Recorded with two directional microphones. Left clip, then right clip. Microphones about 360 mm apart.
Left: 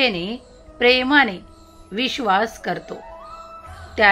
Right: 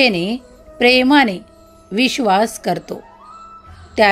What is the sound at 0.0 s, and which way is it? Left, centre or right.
A woman's voice, right.